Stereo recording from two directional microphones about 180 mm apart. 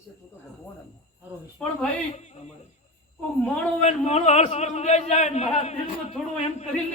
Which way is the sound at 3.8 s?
40° left (ahead or behind).